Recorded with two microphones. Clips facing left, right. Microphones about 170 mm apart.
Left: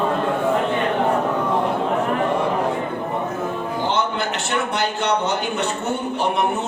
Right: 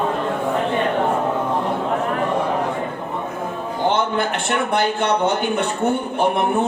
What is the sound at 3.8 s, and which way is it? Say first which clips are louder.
Speech: right 4 dB; 55° right (ahead or behind).